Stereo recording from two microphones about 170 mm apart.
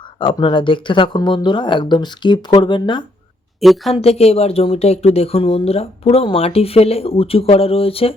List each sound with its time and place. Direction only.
0.2 s speech: 30° left (ahead or behind)
3.6 s a woman's voice: centre (ahead or behind)
3.9 s speech: 35° left (ahead or behind)